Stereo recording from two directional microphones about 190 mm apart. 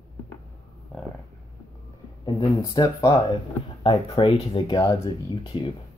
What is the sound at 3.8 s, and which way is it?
Speech, 30° left (ahead or behind).